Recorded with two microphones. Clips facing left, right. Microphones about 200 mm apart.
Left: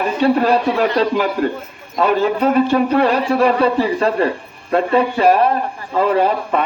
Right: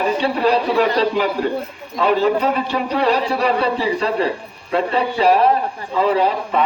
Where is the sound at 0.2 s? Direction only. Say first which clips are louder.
Left 3 dB; 45° left (ahead or behind).